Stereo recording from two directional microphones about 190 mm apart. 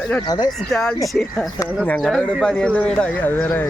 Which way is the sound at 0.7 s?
5° left (ahead or behind).